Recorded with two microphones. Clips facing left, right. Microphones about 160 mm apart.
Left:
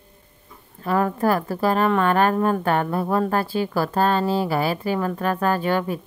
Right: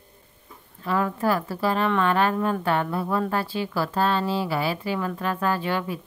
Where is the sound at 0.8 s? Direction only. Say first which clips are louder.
Left 3 dB; 45° left (ahead or behind).